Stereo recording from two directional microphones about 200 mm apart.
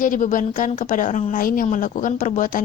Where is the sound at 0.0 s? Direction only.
40° left (ahead or behind).